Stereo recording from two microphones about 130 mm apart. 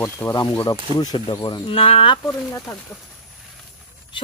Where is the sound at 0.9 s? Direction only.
35° left (ahead or behind).